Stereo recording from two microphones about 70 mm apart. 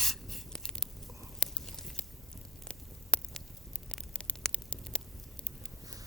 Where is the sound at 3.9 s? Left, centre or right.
Centre.